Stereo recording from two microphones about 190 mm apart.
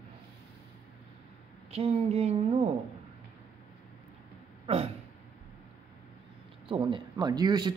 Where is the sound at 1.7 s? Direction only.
35° right (ahead or behind).